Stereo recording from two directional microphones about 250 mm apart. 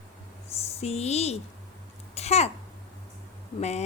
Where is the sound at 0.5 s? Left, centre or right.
Left.